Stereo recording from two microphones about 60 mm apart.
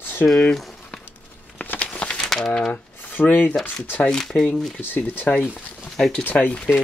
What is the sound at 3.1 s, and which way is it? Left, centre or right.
Speech, left.